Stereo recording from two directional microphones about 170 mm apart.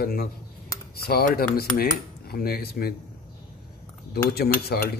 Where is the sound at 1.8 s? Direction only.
60° left (ahead or behind).